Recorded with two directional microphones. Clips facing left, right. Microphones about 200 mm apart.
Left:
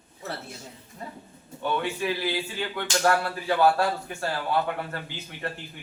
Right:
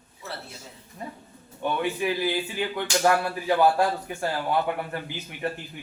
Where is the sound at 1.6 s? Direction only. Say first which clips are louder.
Right 1 dB; 15° right (ahead or behind).